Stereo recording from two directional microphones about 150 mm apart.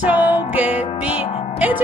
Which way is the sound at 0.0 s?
10° right (ahead or behind).